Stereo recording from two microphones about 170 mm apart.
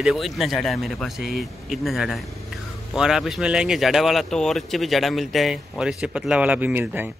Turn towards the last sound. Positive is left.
turn(degrees=-10)  # may be behind; listen again after turning